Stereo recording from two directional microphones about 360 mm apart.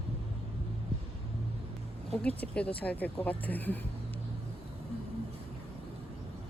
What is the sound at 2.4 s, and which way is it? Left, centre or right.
Speech, centre.